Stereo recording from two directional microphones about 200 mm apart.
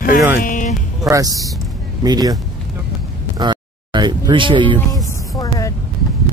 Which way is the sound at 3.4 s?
20° right (ahead or behind).